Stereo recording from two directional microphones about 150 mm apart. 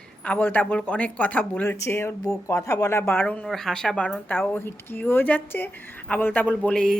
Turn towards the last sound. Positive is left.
turn(degrees=5)  # may be behind; listen again after turning